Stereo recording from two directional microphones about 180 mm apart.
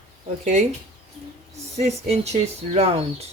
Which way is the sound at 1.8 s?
35° right (ahead or behind).